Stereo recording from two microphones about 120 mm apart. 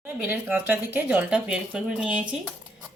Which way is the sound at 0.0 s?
10° right (ahead or behind).